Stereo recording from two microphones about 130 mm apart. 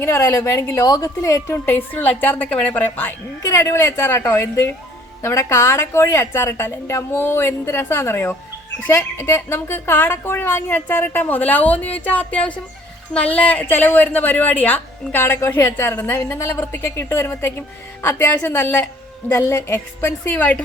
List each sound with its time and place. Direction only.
0.0 s a woman's voice: 20° left (ahead or behind)